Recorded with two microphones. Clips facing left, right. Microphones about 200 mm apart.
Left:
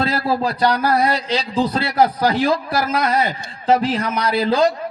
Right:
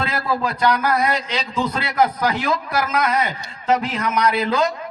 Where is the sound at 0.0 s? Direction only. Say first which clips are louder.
Left 3 dB; 35° left (ahead or behind).